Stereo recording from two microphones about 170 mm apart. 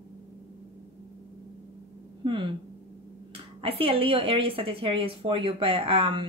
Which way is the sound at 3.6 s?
35° right (ahead or behind).